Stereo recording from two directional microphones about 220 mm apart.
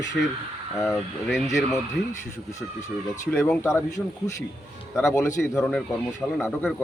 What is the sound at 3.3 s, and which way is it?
Speech, 10° left (ahead or behind).